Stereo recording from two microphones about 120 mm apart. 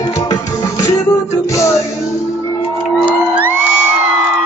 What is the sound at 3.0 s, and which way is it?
Music, 15° right (ahead or behind).